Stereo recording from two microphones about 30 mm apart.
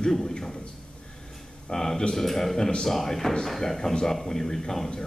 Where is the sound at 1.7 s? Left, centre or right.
Centre.